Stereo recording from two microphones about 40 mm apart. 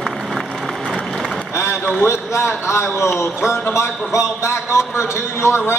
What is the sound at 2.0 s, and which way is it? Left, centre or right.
Speech, left.